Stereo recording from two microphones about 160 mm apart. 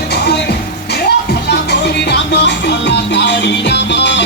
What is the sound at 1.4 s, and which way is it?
Music, 90° left.